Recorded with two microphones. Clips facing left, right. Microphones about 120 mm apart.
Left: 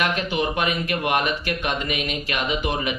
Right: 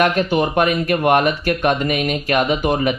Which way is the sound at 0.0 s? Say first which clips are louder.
Right 7 dB; 50° right (ahead or behind).